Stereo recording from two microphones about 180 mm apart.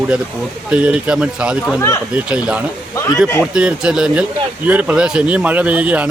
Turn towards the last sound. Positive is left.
turn(degrees=-10)  # may be behind; listen again after turning